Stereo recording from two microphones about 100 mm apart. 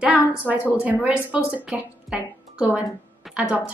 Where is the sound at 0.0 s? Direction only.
15° right (ahead or behind).